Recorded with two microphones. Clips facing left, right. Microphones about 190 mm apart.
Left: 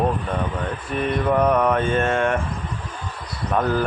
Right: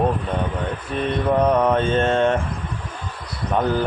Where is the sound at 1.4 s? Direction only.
20° right (ahead or behind).